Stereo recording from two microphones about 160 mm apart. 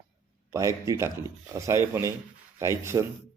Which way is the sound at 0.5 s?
20° right (ahead or behind).